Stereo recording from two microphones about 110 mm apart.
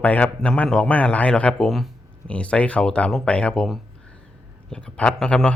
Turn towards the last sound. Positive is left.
turn(degrees=5)  # may be behind; listen again after turning